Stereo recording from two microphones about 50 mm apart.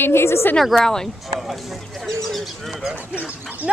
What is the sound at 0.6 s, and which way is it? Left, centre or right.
Speech, centre.